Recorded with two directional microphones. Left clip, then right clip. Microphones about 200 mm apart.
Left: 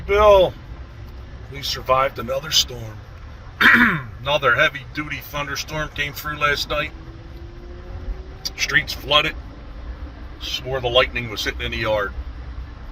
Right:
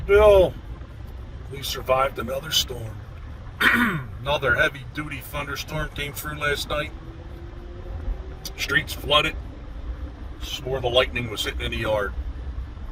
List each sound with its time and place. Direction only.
0.1 s speech: 5° right (ahead or behind)
1.8 s speech: 5° right (ahead or behind)
8.4 s speech: 5° right (ahead or behind)
10.4 s speech: 20° right (ahead or behind)
11.1 s speech: 5° right (ahead or behind)